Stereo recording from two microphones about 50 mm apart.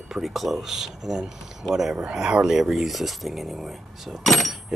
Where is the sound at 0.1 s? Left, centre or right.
Centre.